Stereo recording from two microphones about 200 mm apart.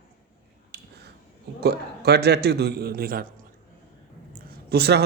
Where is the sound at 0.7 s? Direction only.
55° right (ahead or behind).